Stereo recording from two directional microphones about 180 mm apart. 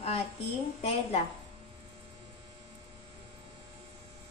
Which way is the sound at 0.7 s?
35° left (ahead or behind).